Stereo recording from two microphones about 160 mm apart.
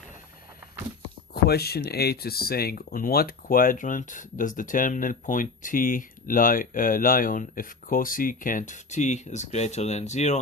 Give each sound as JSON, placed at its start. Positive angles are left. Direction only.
{"t": 1.3, "sound": "speech", "side_deg": 80}